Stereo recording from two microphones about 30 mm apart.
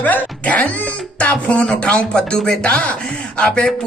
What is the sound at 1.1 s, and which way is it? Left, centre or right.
Speech, left.